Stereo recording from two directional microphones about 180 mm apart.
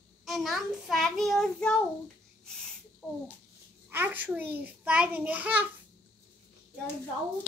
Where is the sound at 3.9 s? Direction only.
10° right (ahead or behind).